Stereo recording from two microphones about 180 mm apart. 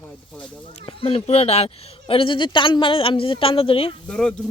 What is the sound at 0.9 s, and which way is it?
Speech, 30° left (ahead or behind).